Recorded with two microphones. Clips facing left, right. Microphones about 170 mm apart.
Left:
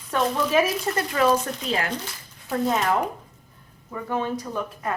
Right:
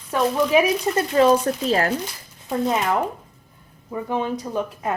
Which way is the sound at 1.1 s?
30° right (ahead or behind).